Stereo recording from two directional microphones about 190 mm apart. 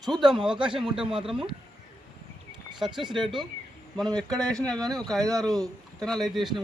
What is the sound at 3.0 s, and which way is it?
Speech, 25° right (ahead or behind).